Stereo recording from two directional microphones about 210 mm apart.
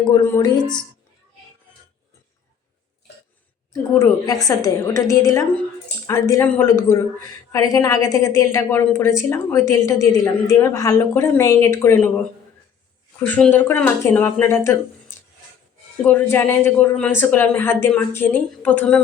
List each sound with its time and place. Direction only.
0.0 s speech: 15° left (ahead or behind)
3.7 s speech: 15° left (ahead or behind)
13.2 s speech: 10° left (ahead or behind)
16.0 s speech: 10° left (ahead or behind)